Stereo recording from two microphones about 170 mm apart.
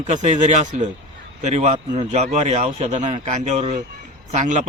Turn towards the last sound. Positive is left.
turn(degrees=-45)  # may be behind; listen again after turning